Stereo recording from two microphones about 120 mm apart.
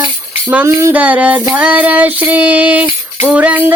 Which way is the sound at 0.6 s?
20° right (ahead or behind).